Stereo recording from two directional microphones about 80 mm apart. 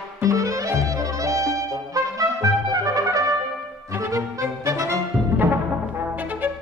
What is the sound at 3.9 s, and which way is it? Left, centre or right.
Music, right.